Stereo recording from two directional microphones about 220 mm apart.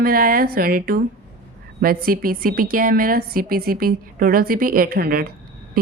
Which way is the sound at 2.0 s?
40° right (ahead or behind).